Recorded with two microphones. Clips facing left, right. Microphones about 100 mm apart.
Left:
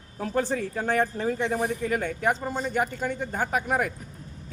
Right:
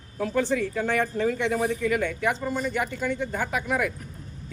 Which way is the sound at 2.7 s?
40° left (ahead or behind).